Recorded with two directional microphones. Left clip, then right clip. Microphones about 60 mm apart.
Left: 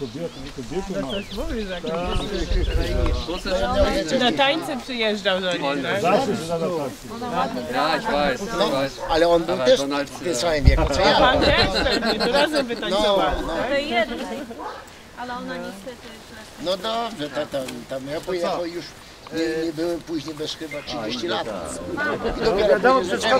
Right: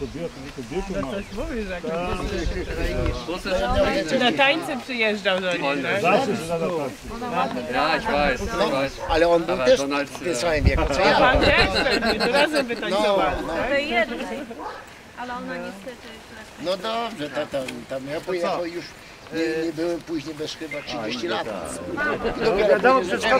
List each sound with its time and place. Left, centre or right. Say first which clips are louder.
1.1 s speech: left 1 dB; centre
1.5 s speech: left 1 dB; centre
2.1 s speech: left 1 dB; right; by 15.6 s centre
16.6 s speech: left 1 dB; centre
19.3 s speech: even; centre
21.5 s a man's voice: left 1 dB; centre
22.0 s speech: even; centre